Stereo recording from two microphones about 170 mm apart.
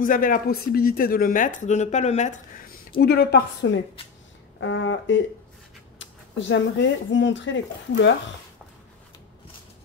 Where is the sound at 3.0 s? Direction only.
75° left (ahead or behind).